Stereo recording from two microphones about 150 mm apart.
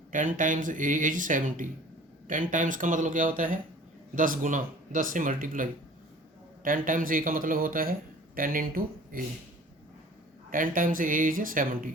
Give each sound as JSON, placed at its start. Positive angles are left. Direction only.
{"t": 0.1, "sound": "speech", "side_deg": -60}
{"t": 6.7, "sound": "speech", "side_deg": -65}
{"t": 10.5, "sound": "speech", "side_deg": -65}